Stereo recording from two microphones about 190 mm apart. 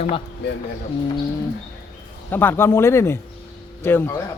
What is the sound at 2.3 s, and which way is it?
Speech, 10° left (ahead or behind).